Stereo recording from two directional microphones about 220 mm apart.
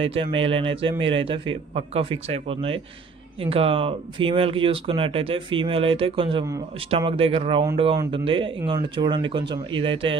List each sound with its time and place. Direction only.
0.0 s speech: 25° right (ahead or behind)